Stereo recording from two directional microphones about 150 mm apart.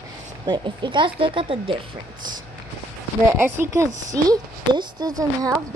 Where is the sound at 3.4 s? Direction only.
20° right (ahead or behind).